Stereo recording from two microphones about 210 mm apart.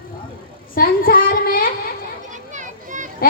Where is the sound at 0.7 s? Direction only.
45° left (ahead or behind).